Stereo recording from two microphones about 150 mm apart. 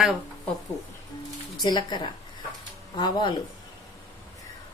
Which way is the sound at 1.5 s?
30° left (ahead or behind).